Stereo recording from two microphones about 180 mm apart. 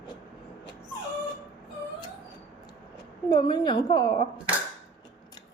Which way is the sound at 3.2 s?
25° left (ahead or behind).